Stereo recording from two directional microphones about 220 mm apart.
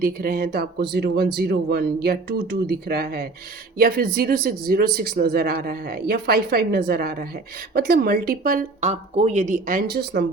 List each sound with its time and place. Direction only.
0.0 s speech: 40° right (ahead or behind)
9.9 s speech: 50° right (ahead or behind)